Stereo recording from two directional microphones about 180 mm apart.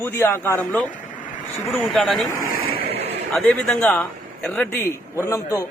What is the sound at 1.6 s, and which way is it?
Speech, centre (ahead or behind).